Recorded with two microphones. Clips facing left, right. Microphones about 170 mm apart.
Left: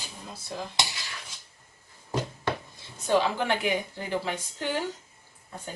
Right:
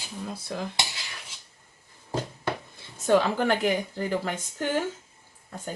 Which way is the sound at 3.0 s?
50° right (ahead or behind).